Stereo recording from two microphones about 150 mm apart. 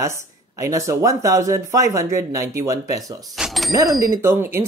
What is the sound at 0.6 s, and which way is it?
Speech, 20° right (ahead or behind).